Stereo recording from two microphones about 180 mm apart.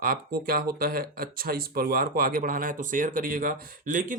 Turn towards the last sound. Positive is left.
turn(degrees=-45)  # may be behind; listen again after turning